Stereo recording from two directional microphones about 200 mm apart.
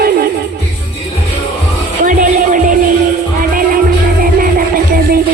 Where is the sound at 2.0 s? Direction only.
40° right (ahead or behind).